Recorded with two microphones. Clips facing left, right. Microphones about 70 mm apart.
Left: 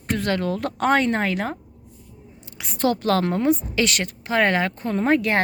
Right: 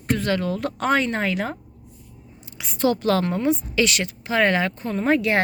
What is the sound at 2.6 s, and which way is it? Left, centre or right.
Speech, left.